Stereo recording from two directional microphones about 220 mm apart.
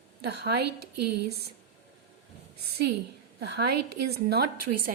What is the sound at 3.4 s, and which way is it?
A woman's voice, 50° right (ahead or behind).